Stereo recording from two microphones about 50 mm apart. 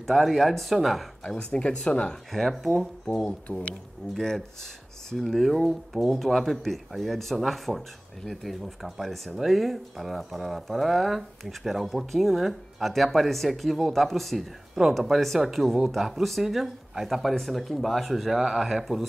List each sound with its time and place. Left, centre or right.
0.1 s speech: centre
1.2 s speech: centre
2.3 s speech: centre
4.1 s speech: centre